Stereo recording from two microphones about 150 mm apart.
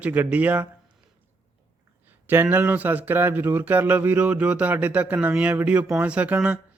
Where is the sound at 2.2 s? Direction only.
15° right (ahead or behind).